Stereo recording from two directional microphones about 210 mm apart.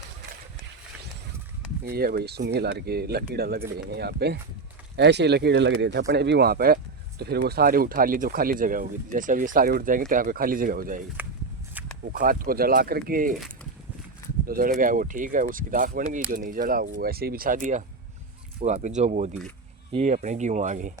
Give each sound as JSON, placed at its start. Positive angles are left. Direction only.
{"t": 1.8, "sound": "speech", "side_deg": -45}
{"t": 11.7, "sound": "a sound", "side_deg": -10}
{"t": 12.1, "sound": "speech", "side_deg": -40}
{"t": 14.4, "sound": "speech", "side_deg": -45}